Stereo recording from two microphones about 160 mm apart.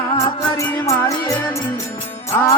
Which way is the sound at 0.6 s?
20° left (ahead or behind).